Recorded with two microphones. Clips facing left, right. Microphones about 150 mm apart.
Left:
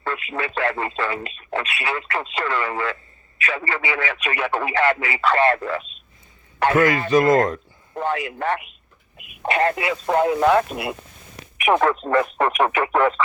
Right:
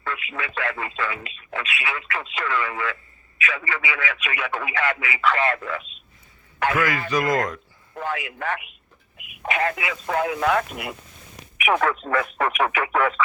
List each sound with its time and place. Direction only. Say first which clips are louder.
0.0 s speech: left 4 dB; 35° left (ahead or behind)